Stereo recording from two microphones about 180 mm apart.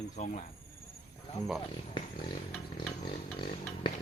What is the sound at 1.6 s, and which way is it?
Speech, 30° left (ahead or behind).